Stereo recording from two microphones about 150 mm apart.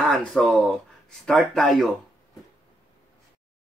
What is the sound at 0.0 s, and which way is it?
Speech, centre (ahead or behind).